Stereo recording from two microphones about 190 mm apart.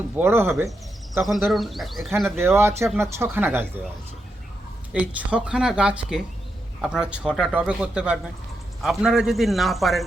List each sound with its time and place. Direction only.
0.2 s speech: 10° right (ahead or behind)
1.5 s speech: centre (ahead or behind)
2.6 s speech: 15° right (ahead or behind)
4.9 s speech: 5° right (ahead or behind)